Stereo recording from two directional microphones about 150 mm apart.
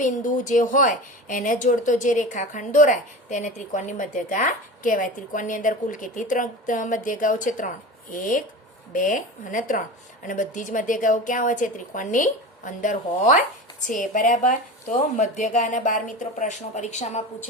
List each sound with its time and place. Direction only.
0.0 s speech: 55° left (ahead or behind)